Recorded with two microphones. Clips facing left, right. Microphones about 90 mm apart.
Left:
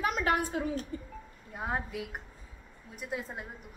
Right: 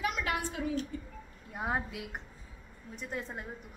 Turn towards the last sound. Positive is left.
turn(degrees=5)  # may be behind; listen again after turning